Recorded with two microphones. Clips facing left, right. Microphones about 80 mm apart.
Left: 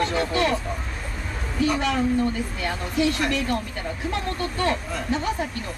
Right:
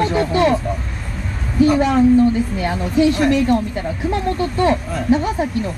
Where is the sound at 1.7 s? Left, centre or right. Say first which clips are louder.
Right 7 dB; centre.